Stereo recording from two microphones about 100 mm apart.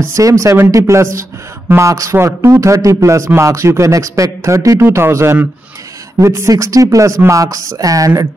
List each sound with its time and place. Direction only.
0.1 s speech: 30° right (ahead or behind)